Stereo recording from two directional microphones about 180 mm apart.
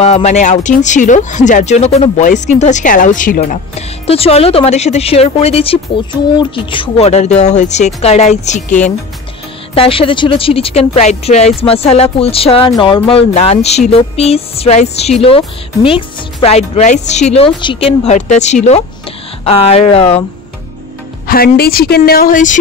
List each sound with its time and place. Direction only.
0.0 s speech: 35° left (ahead or behind)
3.7 s speech: 35° left (ahead or behind)
9.8 s speech: 30° left (ahead or behind)
21.3 s speech: 55° left (ahead or behind)